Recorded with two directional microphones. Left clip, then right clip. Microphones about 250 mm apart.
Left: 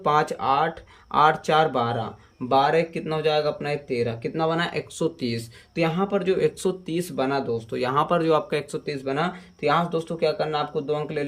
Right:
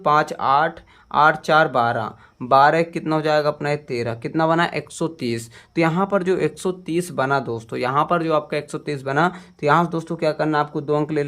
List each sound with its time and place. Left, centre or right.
0.0 s speech: centre
8.8 s speech: centre